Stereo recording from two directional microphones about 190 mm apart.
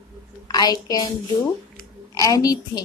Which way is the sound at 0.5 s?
20° left (ahead or behind).